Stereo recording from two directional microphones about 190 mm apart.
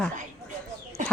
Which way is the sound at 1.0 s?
40° right (ahead or behind).